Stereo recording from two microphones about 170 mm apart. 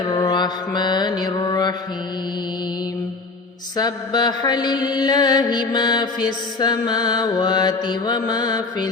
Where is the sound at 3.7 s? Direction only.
25° left (ahead or behind).